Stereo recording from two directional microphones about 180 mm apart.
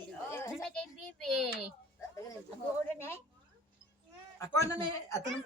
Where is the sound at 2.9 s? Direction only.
15° left (ahead or behind).